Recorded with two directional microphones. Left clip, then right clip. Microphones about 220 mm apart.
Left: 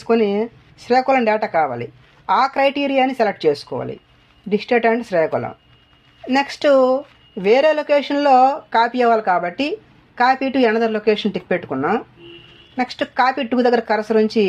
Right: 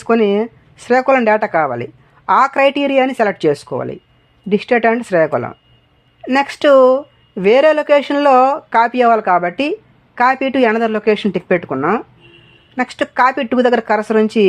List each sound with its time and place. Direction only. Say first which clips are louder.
0.0 s speech: right 3 dB; 40° right (ahead or behind)